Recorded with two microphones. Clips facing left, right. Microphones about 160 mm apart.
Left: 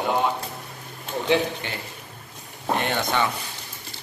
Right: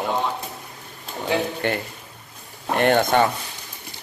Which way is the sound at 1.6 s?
55° right (ahead or behind).